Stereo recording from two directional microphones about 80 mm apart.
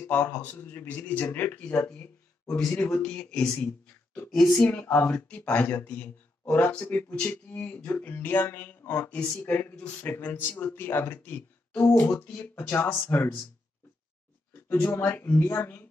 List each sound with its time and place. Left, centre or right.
0.1 s speech: left
2.5 s speech: centre
4.7 s speech: left
5.1 s speech: centre
14.5 s a woman's voice: left